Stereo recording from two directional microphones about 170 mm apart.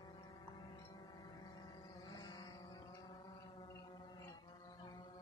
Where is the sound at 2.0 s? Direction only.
25° left (ahead or behind).